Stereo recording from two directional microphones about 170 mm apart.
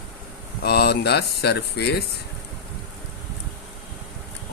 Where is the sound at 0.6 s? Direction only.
70° left (ahead or behind).